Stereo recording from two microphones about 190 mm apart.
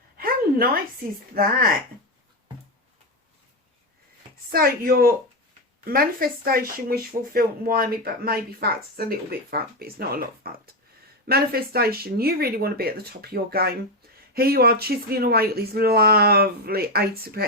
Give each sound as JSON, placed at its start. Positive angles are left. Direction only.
{"t": 0.2, "sound": "a sound", "side_deg": -50}
{"t": 1.4, "sound": "speech", "side_deg": -55}
{"t": 4.5, "sound": "speech", "side_deg": -50}